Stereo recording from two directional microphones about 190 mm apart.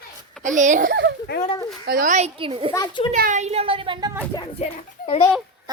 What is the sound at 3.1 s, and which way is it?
A woman's voice, 40° right (ahead or behind).